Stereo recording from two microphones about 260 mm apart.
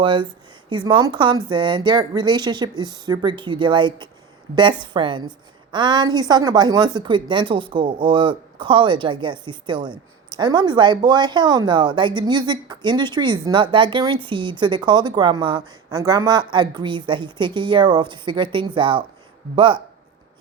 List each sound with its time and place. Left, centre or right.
0.0 s speech: centre